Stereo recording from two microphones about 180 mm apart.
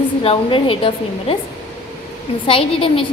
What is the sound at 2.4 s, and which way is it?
Speech, 30° left (ahead or behind).